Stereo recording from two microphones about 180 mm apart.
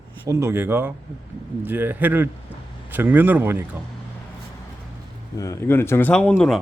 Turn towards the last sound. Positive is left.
turn(degrees=5)  # may be behind; listen again after turning